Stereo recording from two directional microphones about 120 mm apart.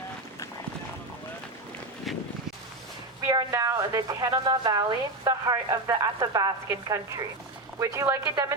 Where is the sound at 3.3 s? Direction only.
30° right (ahead or behind).